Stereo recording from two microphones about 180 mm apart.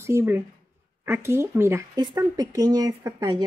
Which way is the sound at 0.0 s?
15° right (ahead or behind).